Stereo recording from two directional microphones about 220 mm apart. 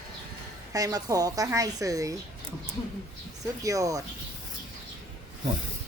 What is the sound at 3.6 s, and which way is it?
Speech, 15° right (ahead or behind).